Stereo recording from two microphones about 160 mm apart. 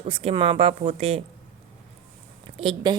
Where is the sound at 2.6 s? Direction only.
35° right (ahead or behind).